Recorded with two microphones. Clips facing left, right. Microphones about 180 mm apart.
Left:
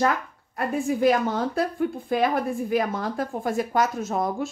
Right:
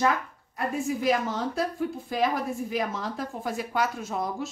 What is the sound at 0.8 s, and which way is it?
A woman's voice, 55° left (ahead or behind).